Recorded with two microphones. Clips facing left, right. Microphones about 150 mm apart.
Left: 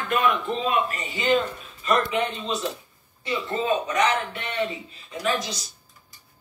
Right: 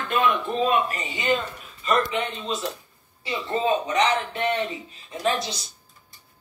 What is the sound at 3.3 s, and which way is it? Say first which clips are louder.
Speech: right 1 dB; 20° right (ahead or behind).